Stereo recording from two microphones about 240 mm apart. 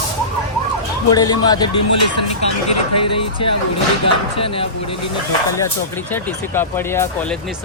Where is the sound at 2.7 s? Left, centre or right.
Left.